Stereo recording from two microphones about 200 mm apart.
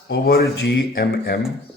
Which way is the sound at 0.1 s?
50° left (ahead or behind).